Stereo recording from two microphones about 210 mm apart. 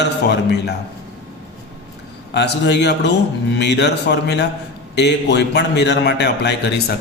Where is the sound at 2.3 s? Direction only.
55° left (ahead or behind).